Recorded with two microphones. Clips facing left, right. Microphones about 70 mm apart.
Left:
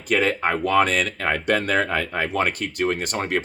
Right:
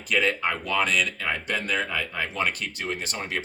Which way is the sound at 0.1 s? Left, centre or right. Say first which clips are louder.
Left 4 dB; left.